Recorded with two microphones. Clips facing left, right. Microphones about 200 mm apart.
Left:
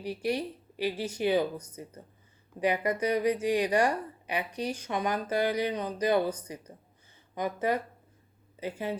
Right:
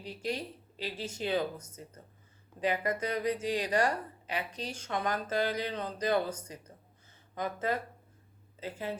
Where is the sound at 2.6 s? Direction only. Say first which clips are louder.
Left 4 dB; 20° left (ahead or behind).